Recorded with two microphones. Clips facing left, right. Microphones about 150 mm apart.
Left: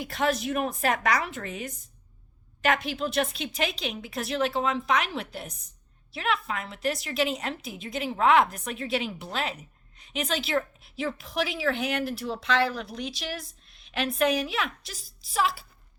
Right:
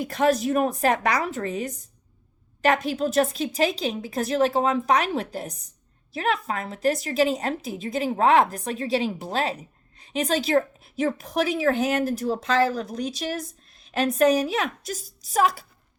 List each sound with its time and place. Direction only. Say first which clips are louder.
0.0 s a woman's voice: right 6 dB; 40° right (ahead or behind)